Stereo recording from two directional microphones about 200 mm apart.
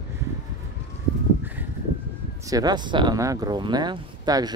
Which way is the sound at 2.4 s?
20° right (ahead or behind).